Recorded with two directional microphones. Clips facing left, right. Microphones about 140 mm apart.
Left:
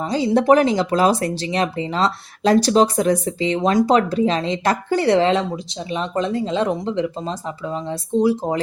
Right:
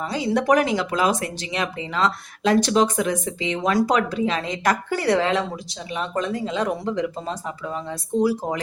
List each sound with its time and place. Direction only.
0.0 s speech: 30° left (ahead or behind)